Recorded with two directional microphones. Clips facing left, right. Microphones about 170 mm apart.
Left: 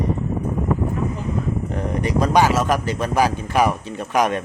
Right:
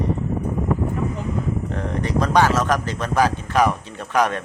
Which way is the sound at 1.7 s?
10° left (ahead or behind).